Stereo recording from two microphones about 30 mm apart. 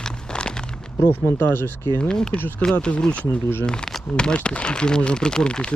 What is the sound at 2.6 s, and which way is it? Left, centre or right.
Speech, left.